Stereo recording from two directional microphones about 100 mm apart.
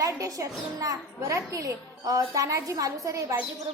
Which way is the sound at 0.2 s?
35° right (ahead or behind).